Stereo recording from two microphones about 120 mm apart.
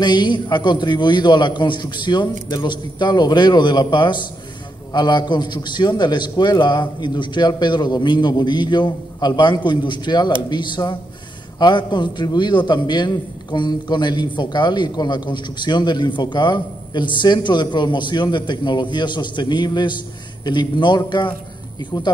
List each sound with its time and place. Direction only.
0.0 s a man's voice: 40° left (ahead or behind)